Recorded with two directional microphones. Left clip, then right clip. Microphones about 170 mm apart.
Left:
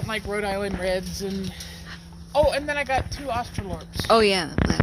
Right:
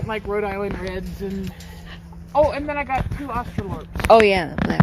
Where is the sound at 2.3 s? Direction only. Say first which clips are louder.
Right 2 dB; 45° left (ahead or behind).